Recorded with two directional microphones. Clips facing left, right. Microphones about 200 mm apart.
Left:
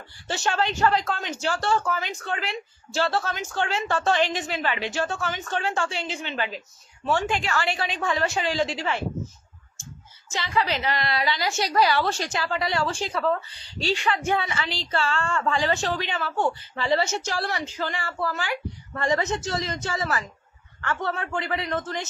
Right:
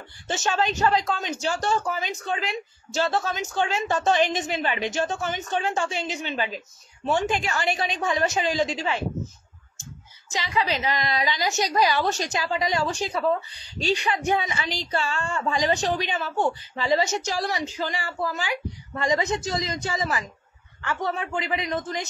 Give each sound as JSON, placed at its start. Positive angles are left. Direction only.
{"t": 0.3, "sound": "a woman's voice", "side_deg": -20}
{"t": 10.3, "sound": "a woman's voice", "side_deg": -15}